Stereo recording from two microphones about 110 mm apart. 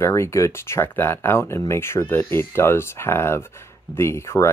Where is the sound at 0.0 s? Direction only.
25° left (ahead or behind).